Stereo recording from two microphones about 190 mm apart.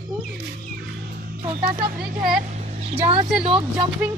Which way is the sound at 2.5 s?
35° right (ahead or behind).